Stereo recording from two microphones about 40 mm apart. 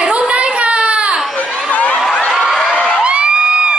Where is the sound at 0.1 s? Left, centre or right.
Right.